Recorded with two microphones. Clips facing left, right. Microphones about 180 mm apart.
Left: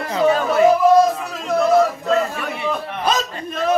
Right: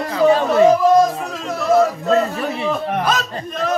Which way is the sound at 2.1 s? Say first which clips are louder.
Right 3 dB; 35° right (ahead or behind).